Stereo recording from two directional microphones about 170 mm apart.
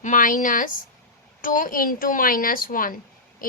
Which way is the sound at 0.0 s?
50° left (ahead or behind).